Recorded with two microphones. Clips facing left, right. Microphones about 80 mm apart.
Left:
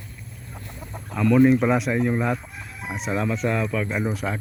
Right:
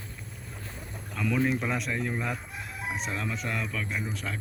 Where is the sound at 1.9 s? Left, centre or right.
Centre.